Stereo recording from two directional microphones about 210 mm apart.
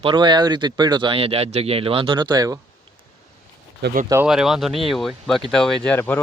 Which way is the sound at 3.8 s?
50° right (ahead or behind).